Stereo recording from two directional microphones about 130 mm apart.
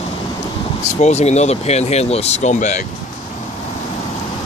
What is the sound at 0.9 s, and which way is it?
Speech, 60° left (ahead or behind).